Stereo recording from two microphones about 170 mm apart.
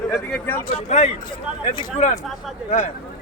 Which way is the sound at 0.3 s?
10° left (ahead or behind).